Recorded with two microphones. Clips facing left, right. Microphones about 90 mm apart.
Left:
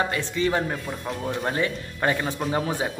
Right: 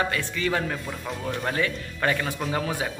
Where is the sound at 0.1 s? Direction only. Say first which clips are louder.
Left 2 dB; 25° left (ahead or behind).